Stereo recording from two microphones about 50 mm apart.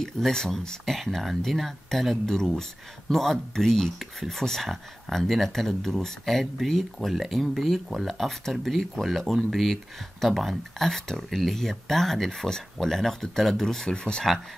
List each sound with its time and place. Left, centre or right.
0.0 s speech: centre
13.9 s speech: centre